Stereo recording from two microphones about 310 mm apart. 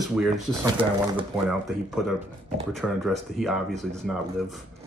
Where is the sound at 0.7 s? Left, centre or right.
Centre.